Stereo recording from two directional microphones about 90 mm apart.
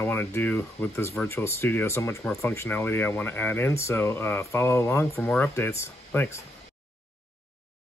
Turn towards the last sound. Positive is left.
turn(degrees=30)  # may be behind; listen again after turning